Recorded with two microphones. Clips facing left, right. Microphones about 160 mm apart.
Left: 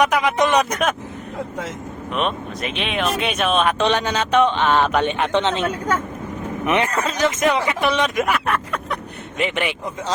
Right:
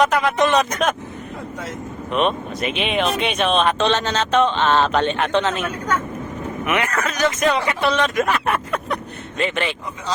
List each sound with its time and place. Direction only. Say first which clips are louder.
0.0 s speech: even; 15° left (ahead or behind)
2.1 s speech: right 3 dB; centre (ahead or behind); by 5.6 s 25° left (ahead or behind)
6.7 s speech: left 2 dB; 25° left (ahead or behind)
8.4 s vehicle: right 1 dB; centre (ahead or behind)
9.4 s speech: even; 15° left (ahead or behind)